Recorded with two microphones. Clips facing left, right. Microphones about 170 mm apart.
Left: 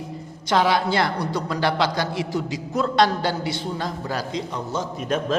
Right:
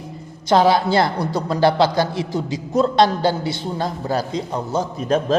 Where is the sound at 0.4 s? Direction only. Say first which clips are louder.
Right 5 dB; 35° right (ahead or behind).